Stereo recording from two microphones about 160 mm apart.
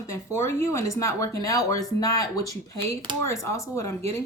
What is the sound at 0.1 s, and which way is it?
Speech, 15° left (ahead or behind).